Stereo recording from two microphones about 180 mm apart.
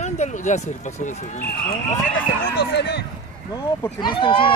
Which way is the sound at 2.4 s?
65° left (ahead or behind).